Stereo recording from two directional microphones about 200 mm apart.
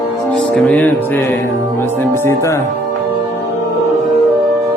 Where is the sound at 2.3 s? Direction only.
15° left (ahead or behind).